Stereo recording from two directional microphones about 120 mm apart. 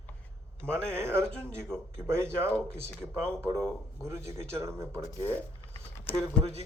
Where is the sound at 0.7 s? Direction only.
20° right (ahead or behind).